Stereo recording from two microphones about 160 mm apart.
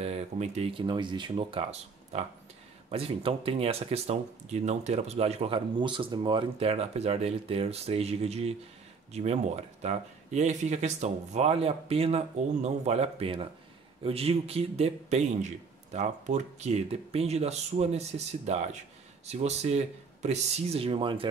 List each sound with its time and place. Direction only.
0.0 s speech: 40° right (ahead or behind)